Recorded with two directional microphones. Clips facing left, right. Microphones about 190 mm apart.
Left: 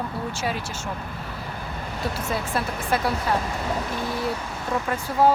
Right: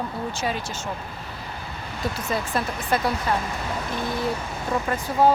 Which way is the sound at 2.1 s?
5° left (ahead or behind).